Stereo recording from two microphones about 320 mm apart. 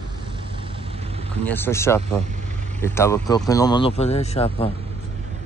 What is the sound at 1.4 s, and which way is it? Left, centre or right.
Speech, centre.